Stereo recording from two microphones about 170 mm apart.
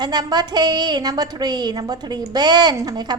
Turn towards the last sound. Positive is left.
turn(degrees=-25)  # may be behind; listen again after turning